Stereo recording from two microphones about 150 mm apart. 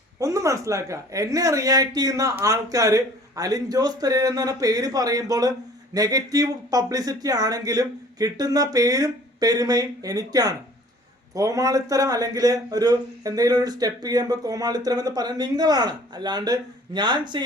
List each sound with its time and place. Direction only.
0.2 s a man's voice: 20° right (ahead or behind)